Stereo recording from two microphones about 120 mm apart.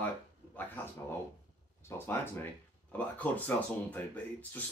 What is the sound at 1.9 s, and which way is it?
Speech, 20° left (ahead or behind).